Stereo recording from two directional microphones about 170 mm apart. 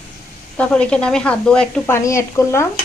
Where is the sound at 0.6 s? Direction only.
5° left (ahead or behind).